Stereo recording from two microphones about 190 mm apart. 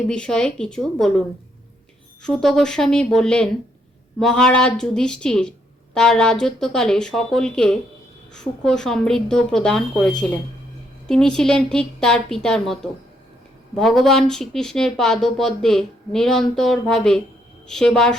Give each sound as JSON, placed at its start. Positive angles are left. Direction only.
{"t": 0.1, "sound": "speech", "side_deg": 5}
{"t": 2.2, "sound": "speech", "side_deg": 0}